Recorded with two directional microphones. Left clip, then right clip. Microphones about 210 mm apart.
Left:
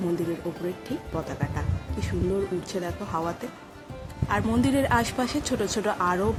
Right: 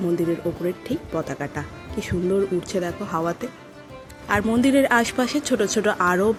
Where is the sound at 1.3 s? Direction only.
15° right (ahead or behind).